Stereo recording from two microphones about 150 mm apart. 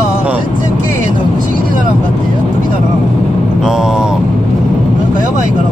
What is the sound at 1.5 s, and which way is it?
Vehicle, 60° right (ahead or behind).